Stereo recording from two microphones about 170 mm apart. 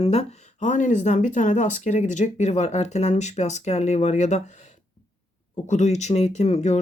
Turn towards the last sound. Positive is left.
turn(degrees=40)  # may be behind; listen again after turning